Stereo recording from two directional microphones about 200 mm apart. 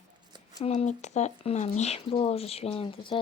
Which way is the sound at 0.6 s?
35° left (ahead or behind).